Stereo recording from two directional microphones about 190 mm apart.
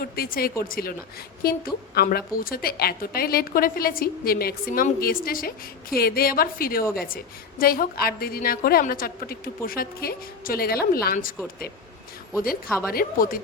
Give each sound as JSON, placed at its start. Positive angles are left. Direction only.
{"t": 0.0, "sound": "a woman's voice", "side_deg": 50}
{"t": 12.6, "sound": "a woman's voice", "side_deg": 0}
{"t": 12.9, "sound": "a woman's voice", "side_deg": 50}